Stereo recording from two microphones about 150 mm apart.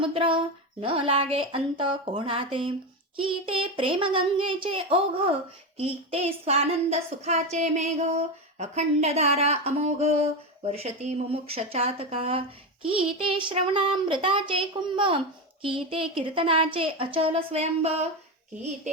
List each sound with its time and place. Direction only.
0.0 s speech: 35° right (ahead or behind)
5.7 s a sound: 40° right (ahead or behind)
12.8 s speech: 40° right (ahead or behind)